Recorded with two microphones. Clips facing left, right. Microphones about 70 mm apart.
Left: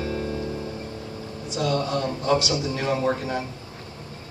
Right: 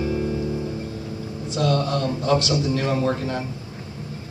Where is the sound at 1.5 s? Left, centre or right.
Centre.